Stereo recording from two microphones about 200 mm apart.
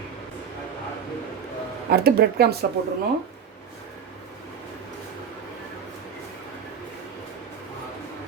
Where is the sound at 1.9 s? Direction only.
50° right (ahead or behind).